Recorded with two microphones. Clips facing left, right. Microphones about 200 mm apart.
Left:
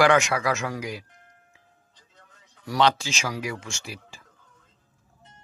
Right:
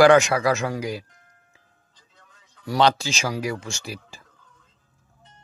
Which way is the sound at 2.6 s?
35° right (ahead or behind).